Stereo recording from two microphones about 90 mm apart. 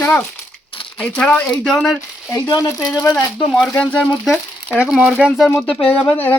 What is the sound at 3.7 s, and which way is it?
Speech, 15° left (ahead or behind).